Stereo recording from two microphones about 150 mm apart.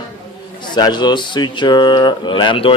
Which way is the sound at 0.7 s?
30° left (ahead or behind).